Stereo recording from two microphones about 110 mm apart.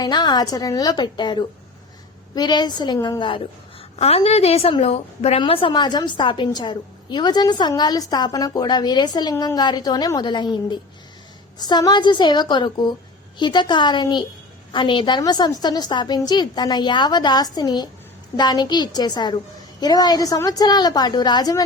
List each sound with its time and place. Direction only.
0.0 s a woman's voice: 40° left (ahead or behind)
3.9 s a woman's voice: 65° left (ahead or behind)
5.4 s a woman's voice: 50° left (ahead or behind)